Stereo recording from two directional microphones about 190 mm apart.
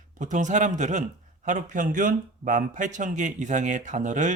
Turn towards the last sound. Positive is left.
turn(degrees=-40)  # may be behind; listen again after turning